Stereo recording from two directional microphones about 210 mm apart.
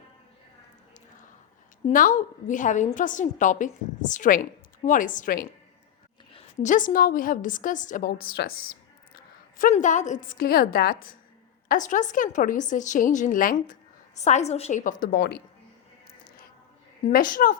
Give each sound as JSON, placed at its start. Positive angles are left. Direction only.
{"t": 1.9, "sound": "a woman's voice", "side_deg": 40}
{"t": 9.6, "sound": "a woman's voice", "side_deg": 35}
{"t": 15.0, "sound": "speech", "side_deg": 50}
{"t": 17.1, "sound": "a woman's voice", "side_deg": 40}